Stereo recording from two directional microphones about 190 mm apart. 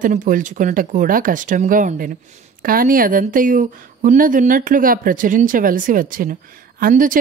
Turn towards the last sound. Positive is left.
turn(degrees=-45)  # may be behind; listen again after turning